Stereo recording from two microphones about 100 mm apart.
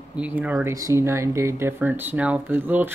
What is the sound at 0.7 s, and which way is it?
Speech, 30° right (ahead or behind).